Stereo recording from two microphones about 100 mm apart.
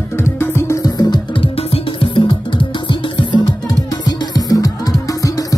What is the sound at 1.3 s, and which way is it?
Music, 65° left (ahead or behind).